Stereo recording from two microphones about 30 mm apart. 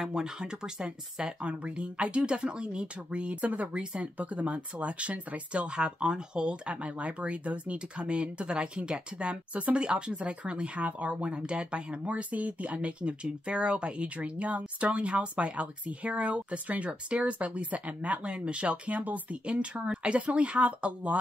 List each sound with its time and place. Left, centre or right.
0.0 s speech: right
1.4 s speech: right
8.9 s speech: right
9.8 s speech: right
11.4 s speech: right
13.5 s speech: right
18.3 s speech: right
19.4 s speech: right